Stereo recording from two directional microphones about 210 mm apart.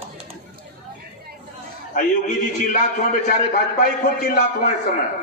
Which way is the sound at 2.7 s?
40° left (ahead or behind).